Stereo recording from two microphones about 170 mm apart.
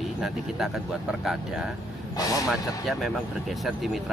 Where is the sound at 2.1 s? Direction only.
20° left (ahead or behind).